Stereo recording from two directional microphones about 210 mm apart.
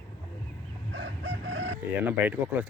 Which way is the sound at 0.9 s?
65° right (ahead or behind).